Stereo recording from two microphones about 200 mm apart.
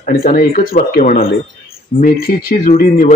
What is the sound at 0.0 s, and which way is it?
A man's voice, 45° left (ahead or behind).